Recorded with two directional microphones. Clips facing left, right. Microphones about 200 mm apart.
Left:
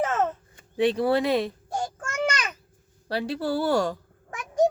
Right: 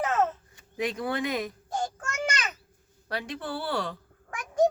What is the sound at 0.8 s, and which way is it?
Speech, 30° left (ahead or behind).